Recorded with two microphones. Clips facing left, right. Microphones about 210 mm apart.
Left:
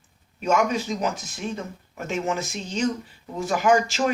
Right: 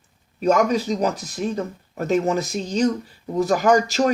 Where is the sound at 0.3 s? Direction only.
35° right (ahead or behind).